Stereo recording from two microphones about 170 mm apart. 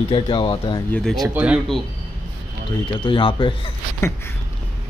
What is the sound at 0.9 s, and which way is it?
Speech, centre (ahead or behind).